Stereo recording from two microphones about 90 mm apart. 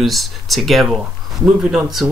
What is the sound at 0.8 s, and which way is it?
Speech, 15° right (ahead or behind).